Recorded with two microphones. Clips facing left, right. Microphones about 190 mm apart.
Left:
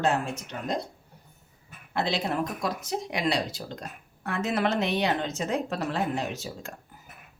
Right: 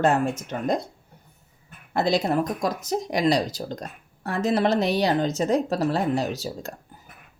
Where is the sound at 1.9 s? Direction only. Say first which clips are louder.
Right 6 dB; 45° right (ahead or behind).